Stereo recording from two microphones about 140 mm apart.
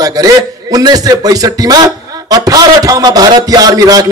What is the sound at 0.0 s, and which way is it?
A man's voice, 25° right (ahead or behind).